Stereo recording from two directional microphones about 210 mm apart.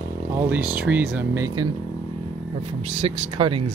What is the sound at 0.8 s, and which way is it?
Speech, 10° right (ahead or behind).